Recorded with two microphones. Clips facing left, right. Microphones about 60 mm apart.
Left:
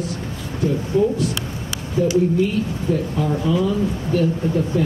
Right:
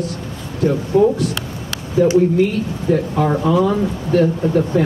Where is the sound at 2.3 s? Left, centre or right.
Right.